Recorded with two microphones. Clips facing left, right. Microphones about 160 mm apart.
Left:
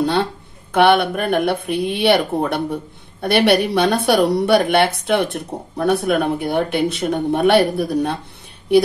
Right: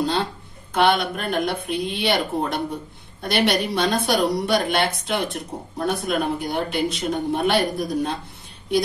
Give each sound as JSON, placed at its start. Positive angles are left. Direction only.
{"t": 0.7, "sound": "speech", "side_deg": 65}